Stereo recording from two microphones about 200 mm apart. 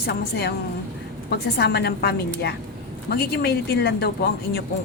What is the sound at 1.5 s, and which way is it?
A woman's voice, 55° left (ahead or behind).